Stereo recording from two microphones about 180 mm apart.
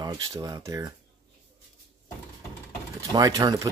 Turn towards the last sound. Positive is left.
turn(degrees=-20)  # may be behind; listen again after turning